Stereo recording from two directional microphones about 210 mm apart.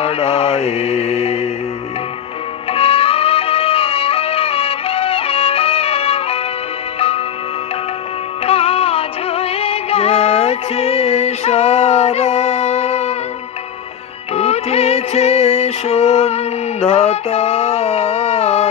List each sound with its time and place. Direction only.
0.0 s mantra: 30° left (ahead or behind)
2.7 s music: 25° left (ahead or behind)
8.5 s music: 30° left (ahead or behind)
14.3 s music: 30° left (ahead or behind)
16.9 s a sound: 30° left (ahead or behind)